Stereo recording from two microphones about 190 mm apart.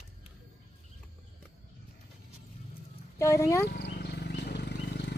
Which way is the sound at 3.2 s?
15° left (ahead or behind).